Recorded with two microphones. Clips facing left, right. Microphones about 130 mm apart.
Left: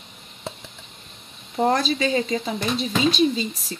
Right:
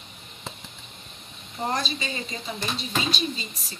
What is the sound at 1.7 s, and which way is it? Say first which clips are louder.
Speech: left 7 dB; 90° left.